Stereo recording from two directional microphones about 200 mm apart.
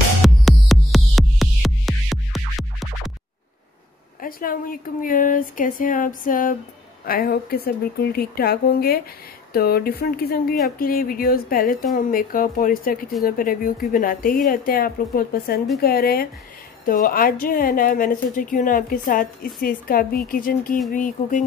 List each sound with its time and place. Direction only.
0.2 s music: centre (ahead or behind)
4.2 s a woman's voice: 45° left (ahead or behind)